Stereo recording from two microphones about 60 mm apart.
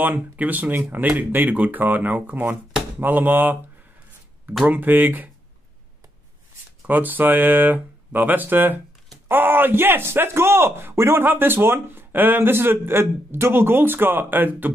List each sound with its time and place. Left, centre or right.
0.0 s a man's voice: right
4.6 s a man's voice: right
6.9 s a man's voice: right